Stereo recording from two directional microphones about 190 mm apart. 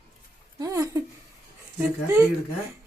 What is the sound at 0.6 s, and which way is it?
Speech, 15° right (ahead or behind).